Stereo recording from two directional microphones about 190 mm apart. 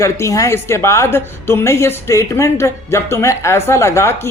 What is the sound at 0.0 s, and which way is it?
Speech, 15° left (ahead or behind).